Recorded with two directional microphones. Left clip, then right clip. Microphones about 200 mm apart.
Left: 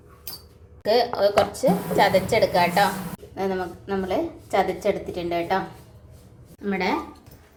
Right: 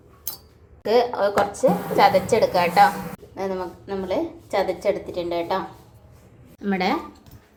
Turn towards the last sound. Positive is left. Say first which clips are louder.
# right 2 dB
turn(degrees=-20)  # may be behind; listen again after turning